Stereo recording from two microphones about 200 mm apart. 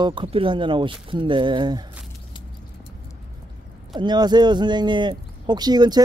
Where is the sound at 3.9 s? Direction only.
20° right (ahead or behind).